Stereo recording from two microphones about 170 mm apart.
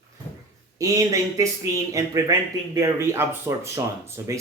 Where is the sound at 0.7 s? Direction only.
20° right (ahead or behind).